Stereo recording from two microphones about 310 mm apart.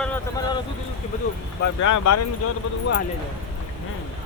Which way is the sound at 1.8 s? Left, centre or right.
Left.